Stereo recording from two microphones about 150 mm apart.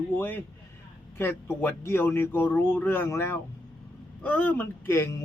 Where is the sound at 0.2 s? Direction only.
15° left (ahead or behind).